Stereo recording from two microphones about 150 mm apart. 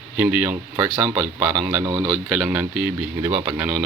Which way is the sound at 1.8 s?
20° right (ahead or behind).